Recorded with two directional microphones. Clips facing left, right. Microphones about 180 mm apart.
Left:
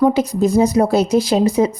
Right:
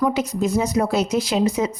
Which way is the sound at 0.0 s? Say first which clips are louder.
Left 6 dB; 30° left (ahead or behind).